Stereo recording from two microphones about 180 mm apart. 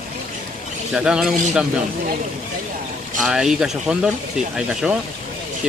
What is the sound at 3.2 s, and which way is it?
Speech, centre (ahead or behind).